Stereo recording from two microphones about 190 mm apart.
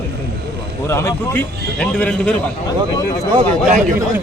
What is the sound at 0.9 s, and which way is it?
A man's voice, 15° left (ahead or behind).